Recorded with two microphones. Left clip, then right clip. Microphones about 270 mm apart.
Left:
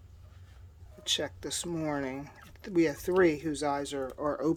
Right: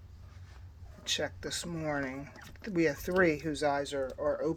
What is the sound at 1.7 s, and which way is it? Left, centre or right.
Speech, centre.